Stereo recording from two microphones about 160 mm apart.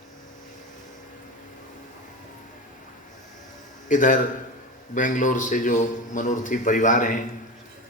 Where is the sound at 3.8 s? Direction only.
55° left (ahead or behind).